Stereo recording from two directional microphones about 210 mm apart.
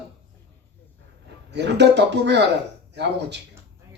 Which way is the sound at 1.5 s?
55° right (ahead or behind).